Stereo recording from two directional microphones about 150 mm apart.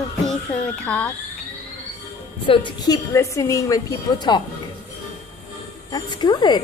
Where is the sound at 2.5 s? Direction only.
30° left (ahead or behind).